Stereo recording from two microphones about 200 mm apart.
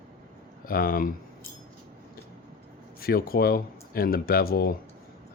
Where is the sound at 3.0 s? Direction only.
50° left (ahead or behind).